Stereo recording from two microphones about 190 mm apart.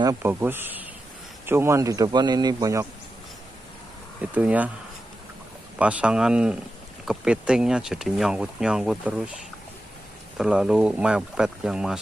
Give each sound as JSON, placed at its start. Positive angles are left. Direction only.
{"t": 0.0, "sound": "a man's voice", "side_deg": -15}
{"t": 4.2, "sound": "a man's voice", "side_deg": -10}
{"t": 5.8, "sound": "speech", "side_deg": -5}
{"t": 10.3, "sound": "speech", "side_deg": -5}